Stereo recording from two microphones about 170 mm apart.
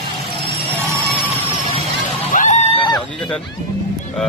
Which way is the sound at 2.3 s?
45° left (ahead or behind).